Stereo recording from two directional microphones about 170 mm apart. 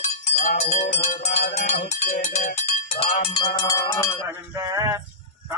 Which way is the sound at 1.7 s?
40° left (ahead or behind).